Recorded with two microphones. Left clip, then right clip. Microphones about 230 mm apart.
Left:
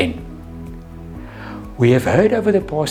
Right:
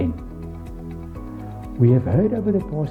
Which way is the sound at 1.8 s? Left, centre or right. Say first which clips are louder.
Left 7 dB; centre.